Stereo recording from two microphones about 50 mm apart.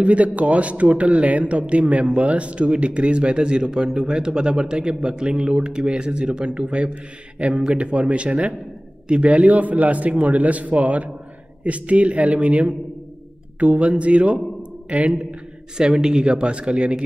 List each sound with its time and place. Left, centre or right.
0.0 s a man's voice: right